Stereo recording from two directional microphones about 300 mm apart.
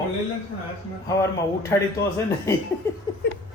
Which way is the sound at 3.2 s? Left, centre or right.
Left.